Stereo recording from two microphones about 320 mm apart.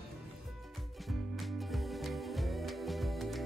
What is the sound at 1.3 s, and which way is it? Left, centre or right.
Music, centre.